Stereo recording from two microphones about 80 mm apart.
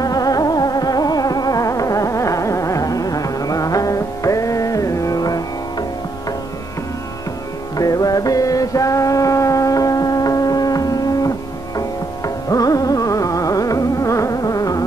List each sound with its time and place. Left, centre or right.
0.0 s music: left
7.7 s music: left